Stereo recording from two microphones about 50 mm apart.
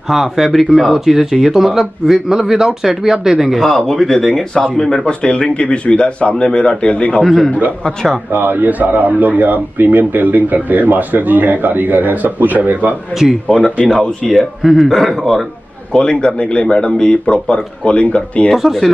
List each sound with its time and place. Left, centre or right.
0.1 s speech: centre
3.6 s a man's voice: centre
4.3 s speech: centre
7.2 s a man's voice: centre
8.3 s a man's voice: right
13.5 s speech: centre
13.9 s speech: centre
14.6 s a man's voice: centre
15.9 s speech: centre
18.5 s a man's voice: centre